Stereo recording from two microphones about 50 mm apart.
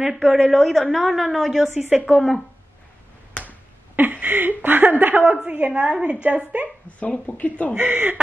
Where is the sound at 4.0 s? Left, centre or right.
Right.